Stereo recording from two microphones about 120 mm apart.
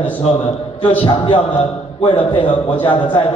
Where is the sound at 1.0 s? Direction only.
50° left (ahead or behind).